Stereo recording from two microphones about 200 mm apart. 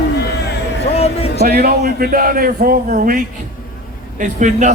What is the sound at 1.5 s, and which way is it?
A man's voice, 50° right (ahead or behind).